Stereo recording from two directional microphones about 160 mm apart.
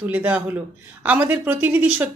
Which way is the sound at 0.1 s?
10° right (ahead or behind).